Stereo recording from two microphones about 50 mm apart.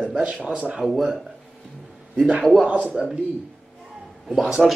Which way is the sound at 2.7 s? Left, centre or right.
Right.